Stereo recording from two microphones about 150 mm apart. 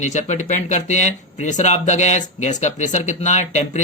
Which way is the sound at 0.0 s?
50° left (ahead or behind).